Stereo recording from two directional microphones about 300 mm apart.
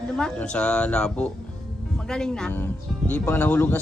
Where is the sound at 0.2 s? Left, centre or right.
Centre.